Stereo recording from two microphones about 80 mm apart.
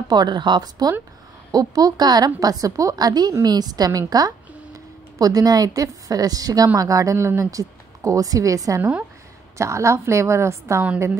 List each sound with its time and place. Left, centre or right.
0.1 s a woman's voice: right
5.2 s a woman's voice: right